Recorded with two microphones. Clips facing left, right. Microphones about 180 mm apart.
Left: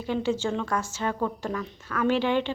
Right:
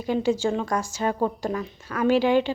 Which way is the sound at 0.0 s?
10° right (ahead or behind).